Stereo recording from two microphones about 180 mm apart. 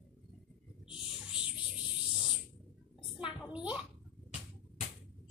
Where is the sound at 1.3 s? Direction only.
5° right (ahead or behind).